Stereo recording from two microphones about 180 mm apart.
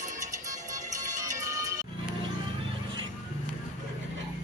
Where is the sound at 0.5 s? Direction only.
20° right (ahead or behind).